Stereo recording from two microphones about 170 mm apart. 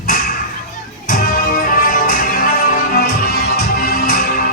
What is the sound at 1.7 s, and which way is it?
Music, 55° left (ahead or behind).